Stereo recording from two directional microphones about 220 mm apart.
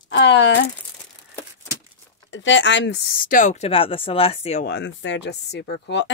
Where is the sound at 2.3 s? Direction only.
55° left (ahead or behind); by 4.6 s 30° left (ahead or behind).